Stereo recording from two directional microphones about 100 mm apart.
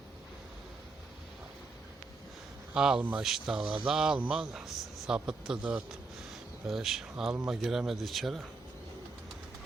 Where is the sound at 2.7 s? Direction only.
5° right (ahead or behind).